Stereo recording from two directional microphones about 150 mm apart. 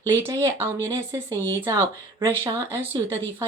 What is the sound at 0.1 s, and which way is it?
A woman's voice, 20° right (ahead or behind).